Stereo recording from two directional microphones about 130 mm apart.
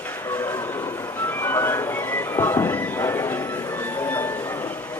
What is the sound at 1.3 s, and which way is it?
Music, 20° left (ahead or behind).